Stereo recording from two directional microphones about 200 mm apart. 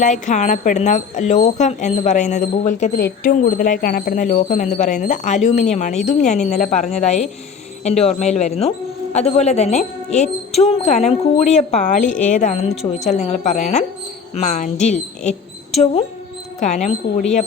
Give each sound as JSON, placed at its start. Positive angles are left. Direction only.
{"t": 0.0, "sound": "speech", "side_deg": 40}
{"t": 16.6, "sound": "speech", "side_deg": 35}